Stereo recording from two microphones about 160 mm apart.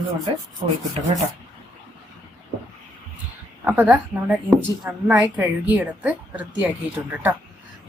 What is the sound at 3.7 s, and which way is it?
A woman's voice, 10° right (ahead or behind).